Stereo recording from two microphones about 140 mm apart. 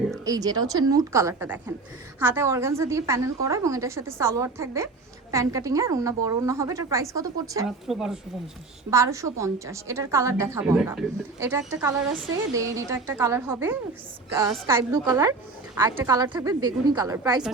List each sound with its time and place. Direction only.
0.3 s a woman's voice: 25° right (ahead or behind)
7.9 s speech: 5° right (ahead or behind)
8.9 s a woman's voice: 20° right (ahead or behind)